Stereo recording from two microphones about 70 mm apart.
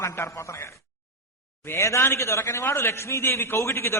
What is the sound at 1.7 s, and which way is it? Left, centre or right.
A man's voice, left.